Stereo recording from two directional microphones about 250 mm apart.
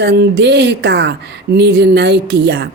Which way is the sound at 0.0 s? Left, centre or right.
Right.